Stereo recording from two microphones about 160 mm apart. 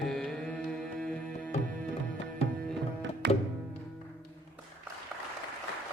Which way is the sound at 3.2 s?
90° right.